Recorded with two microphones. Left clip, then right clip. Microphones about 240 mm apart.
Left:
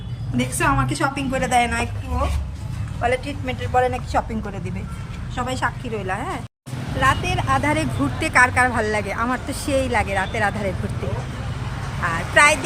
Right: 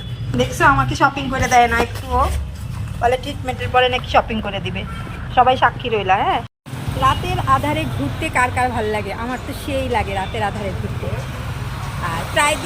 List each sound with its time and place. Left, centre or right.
0.3 s speech: centre
12.3 s speech: centre